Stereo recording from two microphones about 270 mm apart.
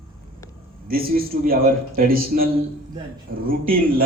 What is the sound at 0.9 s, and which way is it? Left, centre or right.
Speech, right.